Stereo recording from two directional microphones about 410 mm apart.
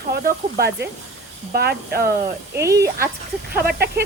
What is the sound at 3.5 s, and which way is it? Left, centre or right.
Speech, right.